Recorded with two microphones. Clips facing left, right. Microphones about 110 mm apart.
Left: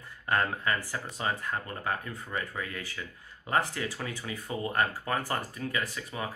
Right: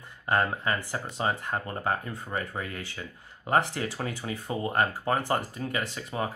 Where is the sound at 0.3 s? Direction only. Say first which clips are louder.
Right 2 dB; 25° right (ahead or behind).